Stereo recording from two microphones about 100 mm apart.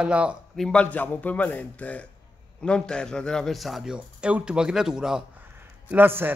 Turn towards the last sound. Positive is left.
turn(degrees=-20)  # may be behind; listen again after turning